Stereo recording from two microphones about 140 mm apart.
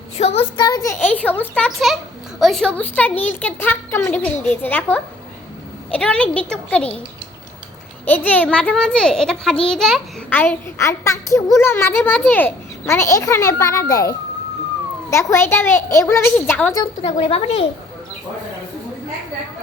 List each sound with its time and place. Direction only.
0.2 s a woman's voice: 50° left (ahead or behind)
0.5 s a child's voice: 30° left (ahead or behind)
0.9 s speech: 10° left (ahead or behind)
8.0 s a child's voice: 10° left (ahead or behind)
16.8 s a woman's voice: 45° left (ahead or behind)